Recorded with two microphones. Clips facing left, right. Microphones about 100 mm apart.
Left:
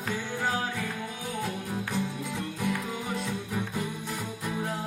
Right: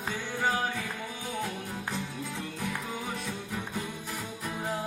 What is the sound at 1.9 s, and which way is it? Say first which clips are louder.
Music: left 4 dB; 15° left (ahead or behind).